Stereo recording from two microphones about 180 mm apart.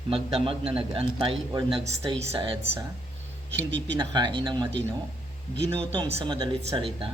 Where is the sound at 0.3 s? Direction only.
30° right (ahead or behind).